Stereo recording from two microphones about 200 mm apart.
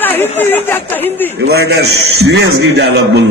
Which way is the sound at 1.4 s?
55° right (ahead or behind).